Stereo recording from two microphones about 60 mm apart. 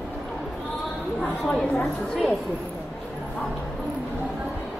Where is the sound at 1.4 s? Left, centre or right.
Centre.